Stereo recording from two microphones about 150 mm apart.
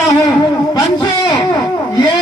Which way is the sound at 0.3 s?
25° left (ahead or behind).